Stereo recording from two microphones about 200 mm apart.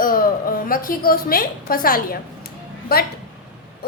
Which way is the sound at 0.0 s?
45° left (ahead or behind).